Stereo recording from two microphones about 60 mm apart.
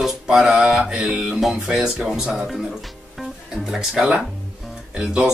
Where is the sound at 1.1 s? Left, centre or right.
Centre.